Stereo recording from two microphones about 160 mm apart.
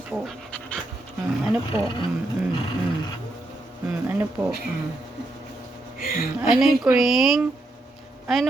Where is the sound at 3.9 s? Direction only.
10° right (ahead or behind).